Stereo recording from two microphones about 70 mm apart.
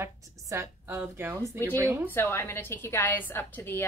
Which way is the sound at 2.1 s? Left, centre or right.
Left.